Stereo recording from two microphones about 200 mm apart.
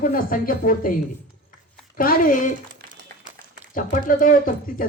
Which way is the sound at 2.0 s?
45° left (ahead or behind).